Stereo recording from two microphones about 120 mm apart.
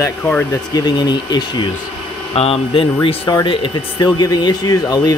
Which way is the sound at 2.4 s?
50° left (ahead or behind).